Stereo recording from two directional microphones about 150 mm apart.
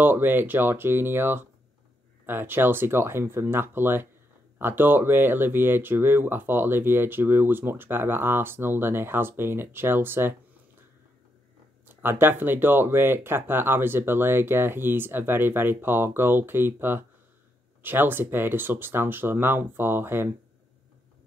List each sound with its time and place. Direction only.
0.0 s speech: 10° right (ahead or behind)
11.8 s speech: 15° right (ahead or behind)